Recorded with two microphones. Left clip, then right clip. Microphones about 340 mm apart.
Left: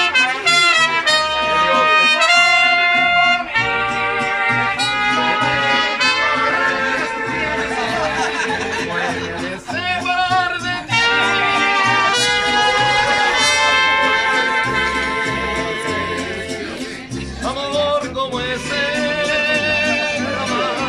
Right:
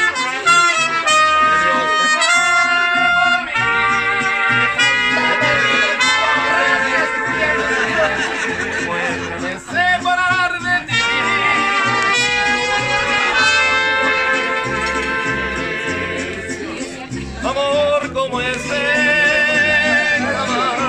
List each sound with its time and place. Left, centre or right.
0.5 s music: left
1.9 s harmonica: left
5.8 s brass instrument: centre
12.1 s music: left
13.4 s music: centre
19.1 s music: centre